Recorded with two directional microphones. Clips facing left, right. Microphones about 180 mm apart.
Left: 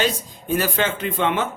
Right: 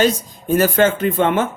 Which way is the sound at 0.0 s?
45° right (ahead or behind).